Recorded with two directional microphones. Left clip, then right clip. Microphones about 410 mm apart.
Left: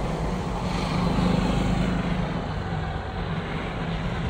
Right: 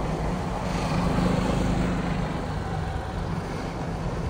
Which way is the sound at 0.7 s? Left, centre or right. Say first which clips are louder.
Even; right.